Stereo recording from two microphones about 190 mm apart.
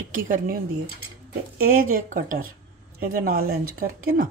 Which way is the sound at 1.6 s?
45° right (ahead or behind).